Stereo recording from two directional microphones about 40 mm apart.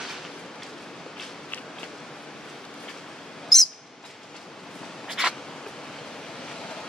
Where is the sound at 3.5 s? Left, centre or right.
Centre.